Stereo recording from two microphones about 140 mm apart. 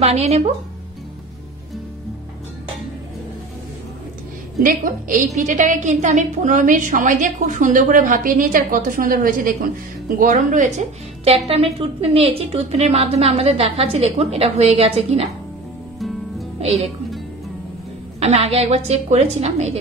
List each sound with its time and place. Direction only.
0.0 s a woman's voice: 50° right (ahead or behind)
4.6 s a woman's voice: 70° right (ahead or behind); by 9.6 s 90° right
10.1 s a woman's voice: 65° right (ahead or behind); by 15.2 s 45° right (ahead or behind)
18.2 s a woman's voice: 45° right (ahead or behind)